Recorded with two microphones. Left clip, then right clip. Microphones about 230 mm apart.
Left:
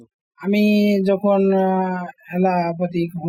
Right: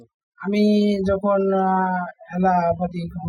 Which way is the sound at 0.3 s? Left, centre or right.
Left.